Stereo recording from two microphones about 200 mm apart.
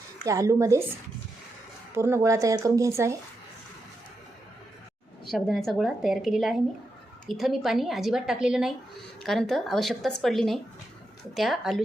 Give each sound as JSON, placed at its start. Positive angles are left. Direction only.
{"t": 0.3, "sound": "speech", "side_deg": -15}
{"t": 2.0, "sound": "speech", "side_deg": -15}
{"t": 5.3, "sound": "a woman's voice", "side_deg": 0}